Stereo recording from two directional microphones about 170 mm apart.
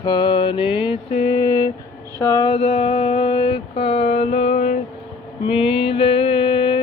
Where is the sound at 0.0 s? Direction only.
25° left (ahead or behind).